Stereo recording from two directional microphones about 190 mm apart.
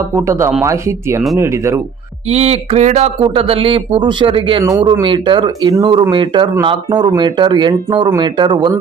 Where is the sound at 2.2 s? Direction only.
35° right (ahead or behind).